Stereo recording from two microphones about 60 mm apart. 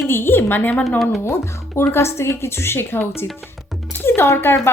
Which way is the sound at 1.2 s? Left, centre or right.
Left.